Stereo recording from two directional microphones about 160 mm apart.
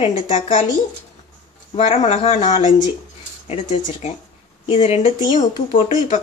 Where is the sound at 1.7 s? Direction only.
35° left (ahead or behind).